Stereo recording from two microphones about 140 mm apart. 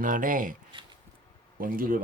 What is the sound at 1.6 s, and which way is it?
Speech, 85° right.